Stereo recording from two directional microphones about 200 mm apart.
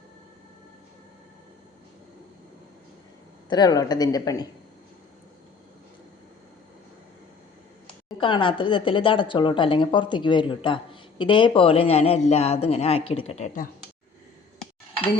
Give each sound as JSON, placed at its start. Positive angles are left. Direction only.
{"t": 3.5, "sound": "a woman's voice", "side_deg": 20}
{"t": 8.2, "sound": "a woman's voice", "side_deg": 25}